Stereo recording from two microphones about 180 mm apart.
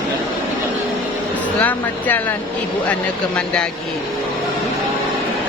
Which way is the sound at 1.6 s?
10° left (ahead or behind).